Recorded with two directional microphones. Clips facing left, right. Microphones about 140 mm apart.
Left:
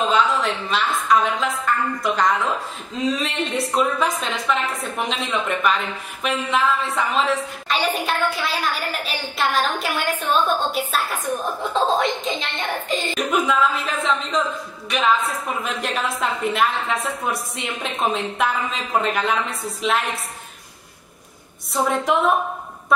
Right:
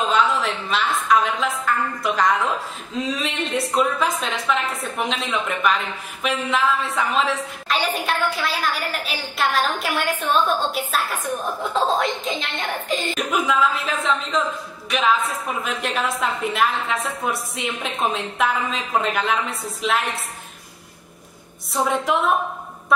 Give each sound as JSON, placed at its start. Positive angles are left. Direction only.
{"t": 0.1, "sound": "a woman's voice", "side_deg": 0}
{"t": 21.7, "sound": "a woman's voice", "side_deg": 0}